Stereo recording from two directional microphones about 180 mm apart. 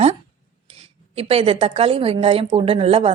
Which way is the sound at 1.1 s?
35° right (ahead or behind).